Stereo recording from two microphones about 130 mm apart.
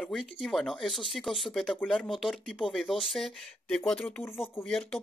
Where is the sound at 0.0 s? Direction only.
Centre (ahead or behind).